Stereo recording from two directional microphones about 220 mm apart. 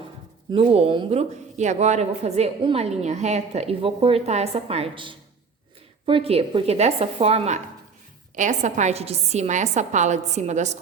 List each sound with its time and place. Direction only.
0.5 s a woman's voice: 25° right (ahead or behind)